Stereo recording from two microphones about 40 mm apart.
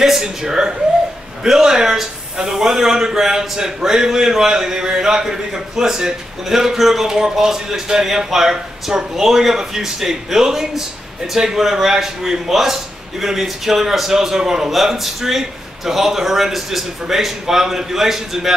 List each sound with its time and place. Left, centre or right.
0.2 s a man's voice: centre